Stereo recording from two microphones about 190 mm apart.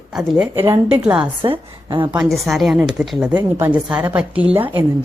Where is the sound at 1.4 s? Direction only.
25° right (ahead or behind).